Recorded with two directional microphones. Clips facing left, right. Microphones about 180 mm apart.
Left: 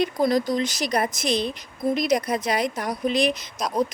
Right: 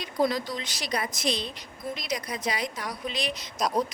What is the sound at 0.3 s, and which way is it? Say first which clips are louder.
Speech: left 9 dB; 45° left (ahead or behind).